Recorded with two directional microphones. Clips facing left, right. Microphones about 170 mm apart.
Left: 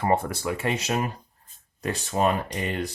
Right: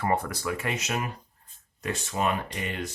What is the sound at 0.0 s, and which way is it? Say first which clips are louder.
Speech: left 3 dB; 25° left (ahead or behind).